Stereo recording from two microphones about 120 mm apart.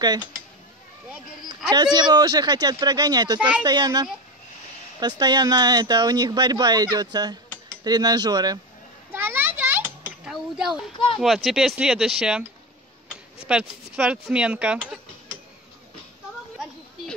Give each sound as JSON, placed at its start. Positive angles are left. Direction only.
{"t": 1.7, "sound": "speech", "side_deg": -35}
{"t": 3.3, "sound": "speech", "side_deg": -10}
{"t": 3.6, "sound": "speech", "side_deg": -35}
{"t": 9.1, "sound": "a sound", "side_deg": -15}
{"t": 10.2, "sound": "a sound", "side_deg": -5}
{"t": 11.1, "sound": "speech", "side_deg": 0}